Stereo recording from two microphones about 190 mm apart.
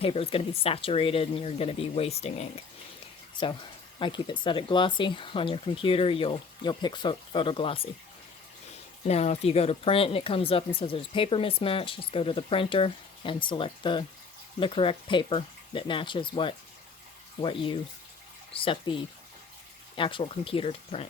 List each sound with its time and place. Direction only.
0.0 s speech: 30° left (ahead or behind)
4.0 s speech: 25° left (ahead or behind)
9.0 s speech: 35° left (ahead or behind)